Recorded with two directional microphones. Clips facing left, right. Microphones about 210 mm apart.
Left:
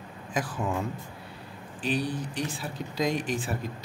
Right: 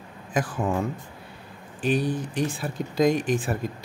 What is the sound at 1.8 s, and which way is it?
Speech, 50° right (ahead or behind).